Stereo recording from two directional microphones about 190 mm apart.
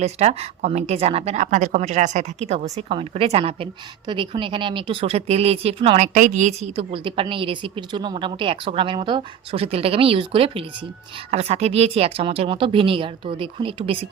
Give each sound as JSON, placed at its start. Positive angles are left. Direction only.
{"t": 0.0, "sound": "a woman's voice", "side_deg": -35}